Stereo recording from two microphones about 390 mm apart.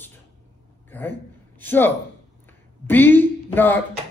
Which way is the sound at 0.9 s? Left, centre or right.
Centre.